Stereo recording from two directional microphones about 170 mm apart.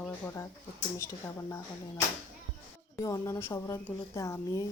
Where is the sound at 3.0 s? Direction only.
20° left (ahead or behind).